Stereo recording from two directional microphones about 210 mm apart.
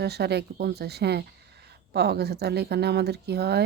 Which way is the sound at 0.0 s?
50° right (ahead or behind).